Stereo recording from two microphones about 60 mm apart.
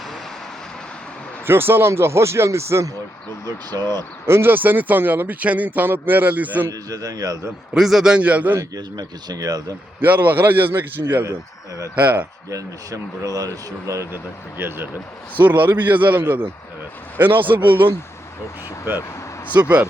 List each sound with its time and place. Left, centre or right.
1.5 s speech: right
3.8 s speech: right
4.3 s speech: right
6.7 s speech: right
7.7 s a man's voice: centre
8.2 s a man's voice: right
9.3 s speech: right
10.0 s speech: right
11.9 s a man's voice: right
12.5 s speech: right
14.6 s a man's voice: right
18.9 s speech: right
19.6 s speech: right